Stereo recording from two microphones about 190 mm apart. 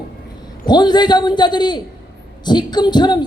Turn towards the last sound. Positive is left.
turn(degrees=20)  # may be behind; listen again after turning